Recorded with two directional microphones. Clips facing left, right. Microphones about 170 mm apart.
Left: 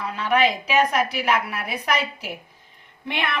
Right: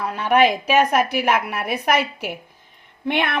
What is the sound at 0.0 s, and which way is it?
A woman's voice, 50° right (ahead or behind).